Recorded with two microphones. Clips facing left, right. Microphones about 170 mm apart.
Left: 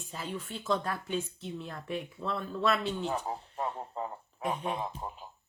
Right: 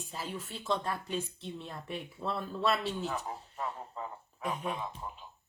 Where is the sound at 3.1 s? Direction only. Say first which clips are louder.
Left 4 dB; 30° left (ahead or behind).